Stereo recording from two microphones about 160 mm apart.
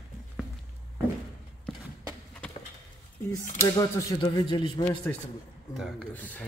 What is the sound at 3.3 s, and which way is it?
Speech, 20° left (ahead or behind).